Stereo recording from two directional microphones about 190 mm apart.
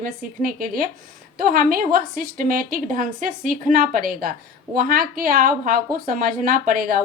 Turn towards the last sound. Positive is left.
turn(degrees=-50)  # may be behind; listen again after turning